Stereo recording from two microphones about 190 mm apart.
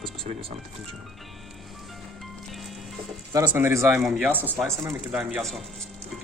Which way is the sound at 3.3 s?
15° right (ahead or behind).